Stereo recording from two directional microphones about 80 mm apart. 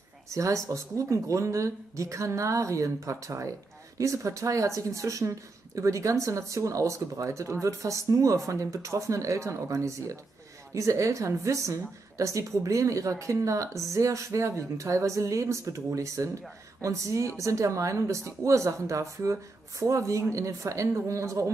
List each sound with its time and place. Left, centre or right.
0.3 s a woman's voice: right